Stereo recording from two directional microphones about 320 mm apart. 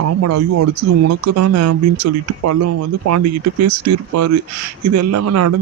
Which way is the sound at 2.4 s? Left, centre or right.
Right.